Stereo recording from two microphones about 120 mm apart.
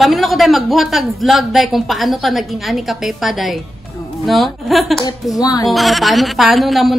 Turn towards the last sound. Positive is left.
turn(degrees=0)  # may be behind; listen again after turning